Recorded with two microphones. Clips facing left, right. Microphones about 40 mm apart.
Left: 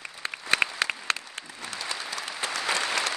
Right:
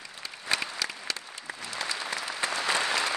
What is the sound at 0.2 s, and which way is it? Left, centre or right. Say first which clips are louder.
Applause: left 6 dB; left.